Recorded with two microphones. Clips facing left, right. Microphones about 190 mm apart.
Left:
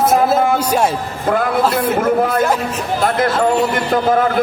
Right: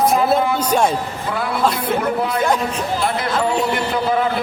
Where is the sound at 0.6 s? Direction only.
10° left (ahead or behind).